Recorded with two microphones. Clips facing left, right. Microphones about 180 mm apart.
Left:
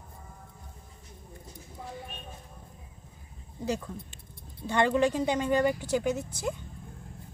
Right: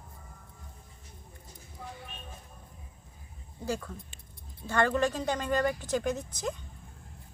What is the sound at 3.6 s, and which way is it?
Speech, 20° left (ahead or behind).